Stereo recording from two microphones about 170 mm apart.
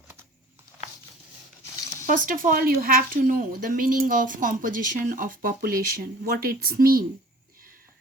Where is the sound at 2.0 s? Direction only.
50° right (ahead or behind).